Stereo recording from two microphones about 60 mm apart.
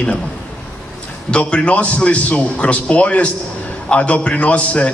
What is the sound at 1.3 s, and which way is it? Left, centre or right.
A man's voice, centre.